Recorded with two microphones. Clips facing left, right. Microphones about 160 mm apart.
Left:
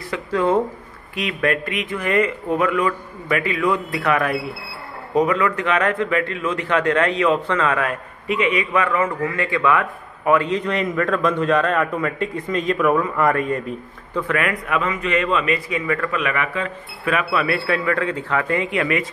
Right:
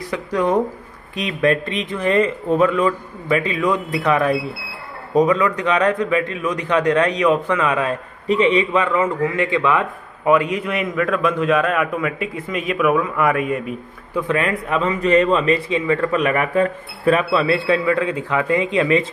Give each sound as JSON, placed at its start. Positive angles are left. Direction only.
{"t": 0.1, "sound": "a man's voice", "side_deg": -15}
{"t": 14.3, "sound": "speech", "side_deg": -25}
{"t": 17.1, "sound": "speech", "side_deg": -25}